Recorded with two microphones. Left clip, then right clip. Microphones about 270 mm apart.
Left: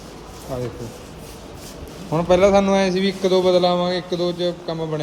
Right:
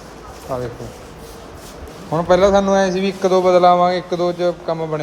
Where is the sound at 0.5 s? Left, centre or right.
Centre.